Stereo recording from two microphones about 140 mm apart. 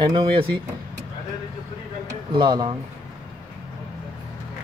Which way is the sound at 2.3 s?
35° right (ahead or behind).